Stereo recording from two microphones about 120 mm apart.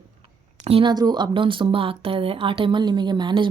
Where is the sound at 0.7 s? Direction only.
40° right (ahead or behind).